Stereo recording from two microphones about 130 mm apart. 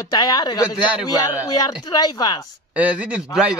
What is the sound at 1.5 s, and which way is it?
Speech, 30° left (ahead or behind).